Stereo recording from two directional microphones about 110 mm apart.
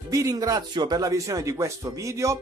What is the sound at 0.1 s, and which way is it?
Speech, 30° right (ahead or behind).